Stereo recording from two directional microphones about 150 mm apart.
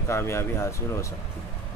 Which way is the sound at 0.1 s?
15° left (ahead or behind).